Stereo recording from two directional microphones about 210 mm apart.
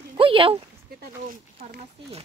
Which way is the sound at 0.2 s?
25° right (ahead or behind).